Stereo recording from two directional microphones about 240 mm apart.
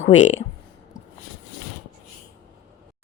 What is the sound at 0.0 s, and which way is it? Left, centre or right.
Speech, left.